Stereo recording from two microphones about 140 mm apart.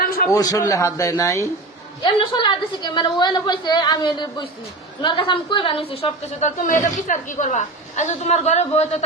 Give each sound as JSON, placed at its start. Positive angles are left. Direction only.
{"t": 0.3, "sound": "a man's voice", "side_deg": 25}
{"t": 2.0, "sound": "a woman's voice", "side_deg": 35}